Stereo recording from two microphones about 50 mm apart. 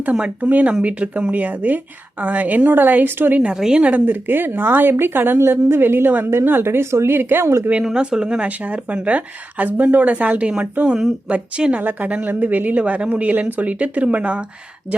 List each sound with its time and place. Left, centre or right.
0.1 s a woman's voice: right
3.4 s a woman's voice: centre
3.9 s a woman's voice: right
7.2 s a woman's voice: right
7.4 s a woman's voice: right
7.9 s speech: centre
8.4 s a woman's voice: right